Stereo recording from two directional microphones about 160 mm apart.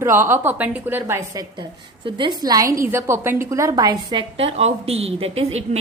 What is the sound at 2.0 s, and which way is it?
Speech, 35° right (ahead or behind).